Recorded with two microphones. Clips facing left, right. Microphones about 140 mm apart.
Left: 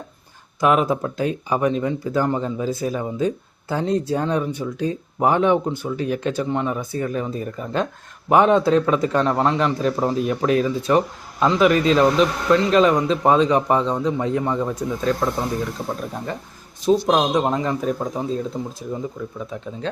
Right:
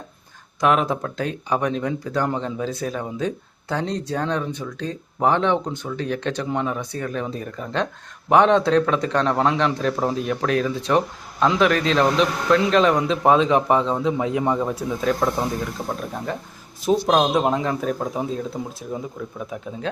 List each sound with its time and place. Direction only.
0.6 s speech: 5° left (ahead or behind)
16.8 s speech: 5° right (ahead or behind)